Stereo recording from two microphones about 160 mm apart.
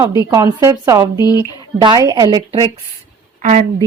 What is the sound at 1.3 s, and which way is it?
Speech, 25° left (ahead or behind).